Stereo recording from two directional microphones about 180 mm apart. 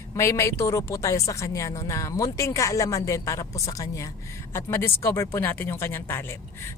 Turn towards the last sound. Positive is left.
turn(degrees=15)  # may be behind; listen again after turning